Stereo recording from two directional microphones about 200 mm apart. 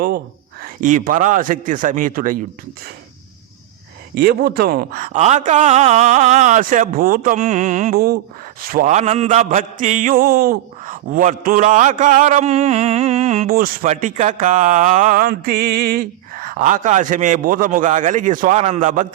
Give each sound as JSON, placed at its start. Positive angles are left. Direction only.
{"t": 0.6, "sound": "mantra", "side_deg": -40}
{"t": 4.1, "sound": "speech", "side_deg": -50}
{"t": 5.0, "sound": "mantra", "side_deg": -35}